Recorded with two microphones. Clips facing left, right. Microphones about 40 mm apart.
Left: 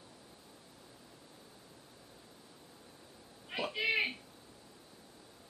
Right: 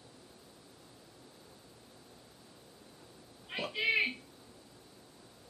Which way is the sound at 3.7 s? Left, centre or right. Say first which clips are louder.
Right 3 dB; centre.